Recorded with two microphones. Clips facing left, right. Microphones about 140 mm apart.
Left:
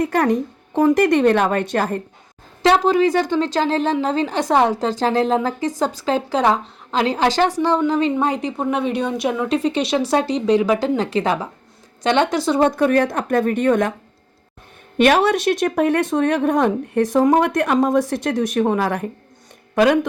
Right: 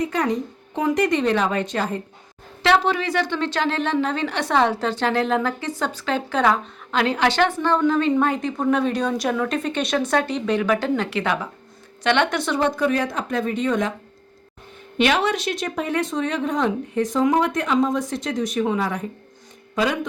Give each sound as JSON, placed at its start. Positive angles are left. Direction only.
{"t": 0.0, "sound": "speech", "side_deg": 55}
{"t": 2.6, "sound": "a woman's voice", "side_deg": 40}
{"t": 7.1, "sound": "a woman's voice", "side_deg": 40}
{"t": 7.9, "sound": "speech", "side_deg": 20}
{"t": 9.2, "sound": "a woman's voice", "side_deg": 10}
{"t": 9.6, "sound": "a woman's voice", "side_deg": 30}
{"t": 10.8, "sound": "a woman's voice", "side_deg": 35}
{"t": 14.9, "sound": "speech", "side_deg": 50}